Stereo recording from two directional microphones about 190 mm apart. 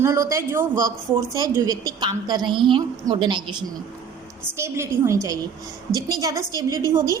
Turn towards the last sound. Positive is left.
turn(degrees=-20)  # may be behind; listen again after turning